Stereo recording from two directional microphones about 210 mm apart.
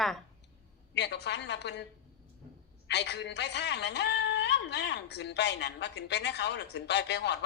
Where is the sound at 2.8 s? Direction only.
55° left (ahead or behind).